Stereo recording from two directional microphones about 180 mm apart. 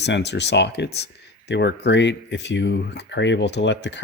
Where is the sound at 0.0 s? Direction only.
70° left (ahead or behind).